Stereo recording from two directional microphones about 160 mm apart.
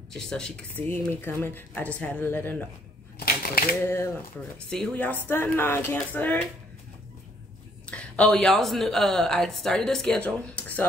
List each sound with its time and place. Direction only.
0.1 s speech: 5° left (ahead or behind)
3.8 s speech: 15° left (ahead or behind)
4.6 s speech: 5° left (ahead or behind)
7.8 s speech: 5° left (ahead or behind)